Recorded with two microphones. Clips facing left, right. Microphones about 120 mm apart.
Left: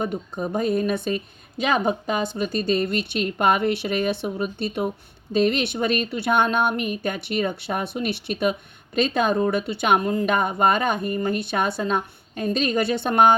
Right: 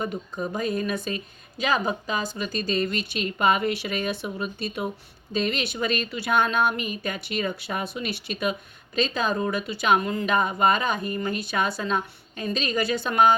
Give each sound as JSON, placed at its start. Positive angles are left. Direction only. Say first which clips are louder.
{"t": 0.0, "sound": "speech", "louder": "left 3 dB", "side_deg": 60}